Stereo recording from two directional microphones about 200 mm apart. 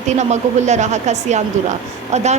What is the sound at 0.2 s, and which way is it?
A woman's voice, 35° right (ahead or behind).